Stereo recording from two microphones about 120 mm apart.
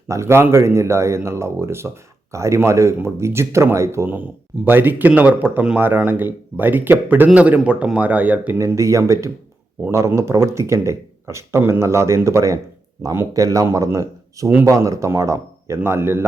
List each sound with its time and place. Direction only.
0.1 s speech: 25° right (ahead or behind)
8.6 s speech: 25° right (ahead or behind)